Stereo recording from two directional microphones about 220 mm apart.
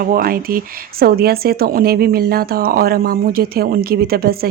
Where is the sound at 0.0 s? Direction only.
40° right (ahead or behind).